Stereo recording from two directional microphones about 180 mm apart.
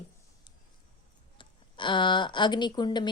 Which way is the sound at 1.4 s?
25° left (ahead or behind).